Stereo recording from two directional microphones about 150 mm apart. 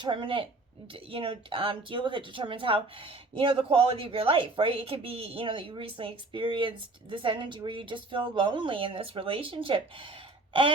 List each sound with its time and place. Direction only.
0.0 s speech: 35° right (ahead or behind)